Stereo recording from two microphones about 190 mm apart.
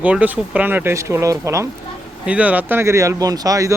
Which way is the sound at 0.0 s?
10° right (ahead or behind).